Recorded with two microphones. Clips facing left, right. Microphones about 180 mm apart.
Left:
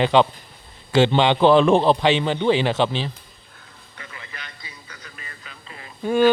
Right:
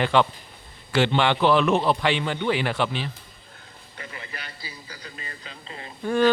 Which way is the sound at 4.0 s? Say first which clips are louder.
Right 2 dB; 35° right (ahead or behind).